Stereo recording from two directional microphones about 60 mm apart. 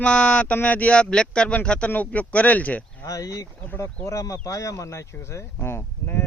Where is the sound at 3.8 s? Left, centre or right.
Left.